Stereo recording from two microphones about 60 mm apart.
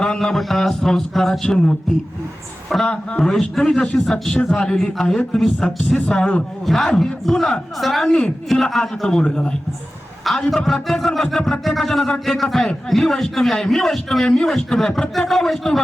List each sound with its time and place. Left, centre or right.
0.0 s mantra: centre
0.3 s a man's voice: centre
2.8 s a man's voice: centre
6.0 s a man's voice: centre
6.7 s a man's voice: centre
10.2 s a man's voice: centre